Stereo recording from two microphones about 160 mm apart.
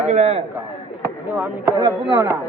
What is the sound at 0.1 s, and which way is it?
Speech, 40° right (ahead or behind).